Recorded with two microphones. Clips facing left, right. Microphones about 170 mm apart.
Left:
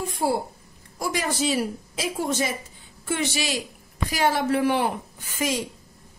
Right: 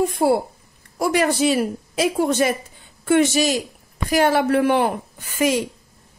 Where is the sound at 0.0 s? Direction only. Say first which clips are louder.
Right 7 dB; 60° right (ahead or behind).